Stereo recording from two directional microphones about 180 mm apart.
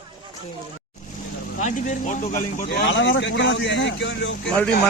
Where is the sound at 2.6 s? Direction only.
85° left.